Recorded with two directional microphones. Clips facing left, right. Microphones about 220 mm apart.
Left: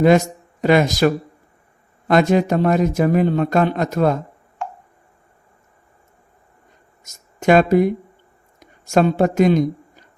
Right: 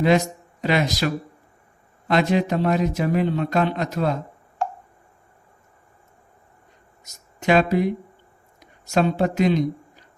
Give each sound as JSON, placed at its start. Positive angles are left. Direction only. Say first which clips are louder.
{"t": 0.6, "sound": "a man's voice", "louder": "left 7 dB", "side_deg": 50}
{"t": 7.0, "sound": "speech", "louder": "left 6 dB", "side_deg": 45}
{"t": 8.5, "sound": "a sound", "louder": "left 5 dB", "side_deg": 50}